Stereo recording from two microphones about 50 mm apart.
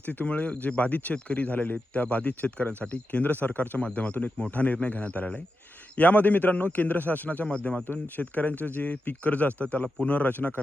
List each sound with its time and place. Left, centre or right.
0.0 s speech: left
3.8 s a man's voice: centre
4.5 s speech: left
7.4 s a man's voice: left
7.9 s speech: left